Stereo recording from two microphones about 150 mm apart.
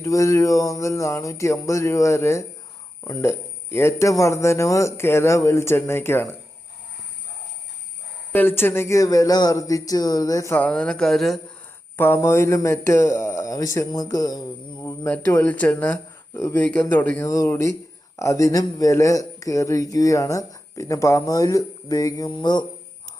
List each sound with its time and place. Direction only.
0.0 s speech: 20° left (ahead or behind)
8.3 s speech: 15° left (ahead or behind)
11.9 s a man's voice: 15° left (ahead or behind)